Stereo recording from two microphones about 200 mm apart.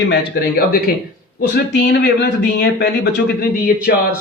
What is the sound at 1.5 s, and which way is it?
Speech, 55° left (ahead or behind).